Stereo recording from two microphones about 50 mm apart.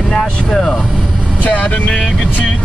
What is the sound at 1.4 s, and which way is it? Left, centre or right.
Speech, left.